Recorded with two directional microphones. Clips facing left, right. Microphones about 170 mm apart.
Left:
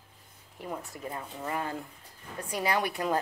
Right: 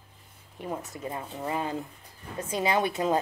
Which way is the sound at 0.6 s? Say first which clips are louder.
Right 3 dB; 20° right (ahead or behind).